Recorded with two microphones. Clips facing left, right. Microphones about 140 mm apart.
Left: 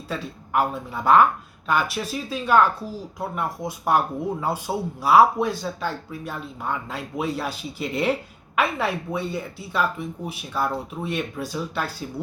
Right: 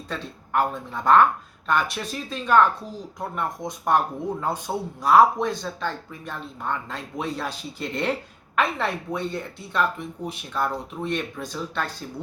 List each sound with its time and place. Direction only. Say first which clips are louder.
0.1 s speech: left 1 dB; 5° left (ahead or behind)